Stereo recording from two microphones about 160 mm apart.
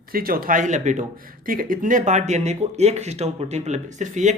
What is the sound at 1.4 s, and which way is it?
Speech, 60° right (ahead or behind).